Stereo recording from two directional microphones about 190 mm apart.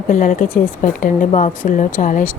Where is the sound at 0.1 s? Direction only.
45° left (ahead or behind).